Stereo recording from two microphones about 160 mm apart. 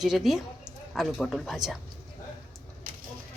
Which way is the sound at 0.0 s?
Centre (ahead or behind).